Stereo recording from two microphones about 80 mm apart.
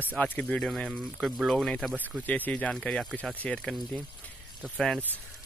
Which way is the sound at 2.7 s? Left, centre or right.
Centre.